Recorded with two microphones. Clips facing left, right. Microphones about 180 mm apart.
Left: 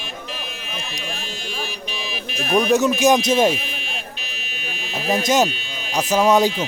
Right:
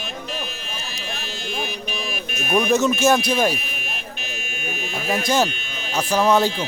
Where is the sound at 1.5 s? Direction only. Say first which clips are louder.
Right 4 dB; 50° right (ahead or behind).